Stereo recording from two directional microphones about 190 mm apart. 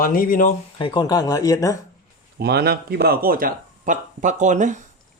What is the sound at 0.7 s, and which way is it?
Speech, 25° left (ahead or behind).